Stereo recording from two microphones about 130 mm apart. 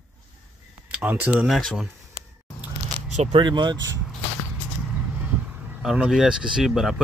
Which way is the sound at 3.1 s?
55° right (ahead or behind).